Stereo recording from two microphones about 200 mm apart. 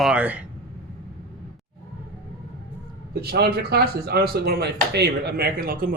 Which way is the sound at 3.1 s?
50° right (ahead or behind).